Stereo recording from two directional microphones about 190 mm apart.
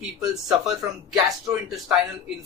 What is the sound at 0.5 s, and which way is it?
Speech, centre (ahead or behind).